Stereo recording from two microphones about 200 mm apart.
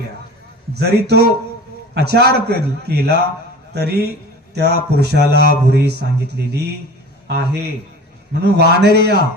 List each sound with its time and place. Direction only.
0.9 s speech: 55° right (ahead or behind)